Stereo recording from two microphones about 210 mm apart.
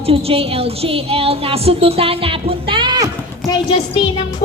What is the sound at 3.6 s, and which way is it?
Speech, 30° left (ahead or behind).